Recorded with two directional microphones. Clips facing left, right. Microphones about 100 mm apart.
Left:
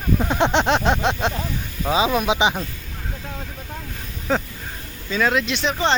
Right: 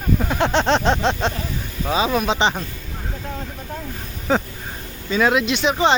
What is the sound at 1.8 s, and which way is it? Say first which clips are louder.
Speech: left 1 dB; 20° left (ahead or behind).